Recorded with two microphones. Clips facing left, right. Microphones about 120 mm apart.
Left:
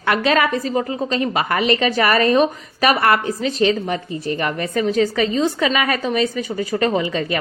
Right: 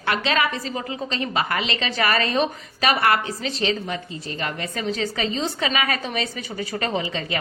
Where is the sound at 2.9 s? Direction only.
35° left (ahead or behind).